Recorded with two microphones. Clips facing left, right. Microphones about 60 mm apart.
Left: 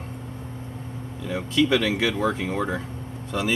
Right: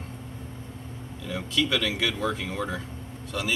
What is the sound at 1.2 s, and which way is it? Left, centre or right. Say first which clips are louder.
Speech: left 5 dB; left.